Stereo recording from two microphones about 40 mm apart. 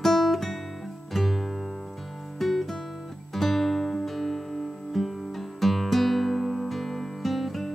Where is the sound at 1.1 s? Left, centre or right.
Centre.